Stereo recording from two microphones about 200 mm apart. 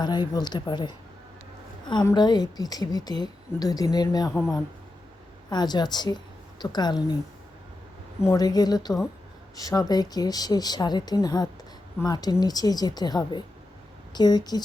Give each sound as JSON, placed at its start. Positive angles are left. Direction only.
{"t": 0.0, "sound": "a woman's voice", "side_deg": 20}
{"t": 5.5, "sound": "a woman's voice", "side_deg": 20}
{"t": 8.2, "sound": "a woman's voice", "side_deg": 15}